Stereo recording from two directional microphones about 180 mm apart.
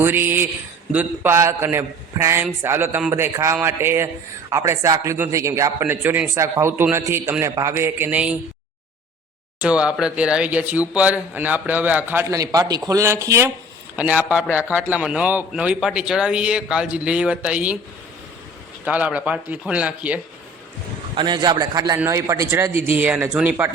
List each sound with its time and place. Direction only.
0.0 s a man's voice: 10° right (ahead or behind)
9.6 s a man's voice: 5° right (ahead or behind)
18.9 s a man's voice: 10° right (ahead or behind)
21.2 s a man's voice: 25° right (ahead or behind)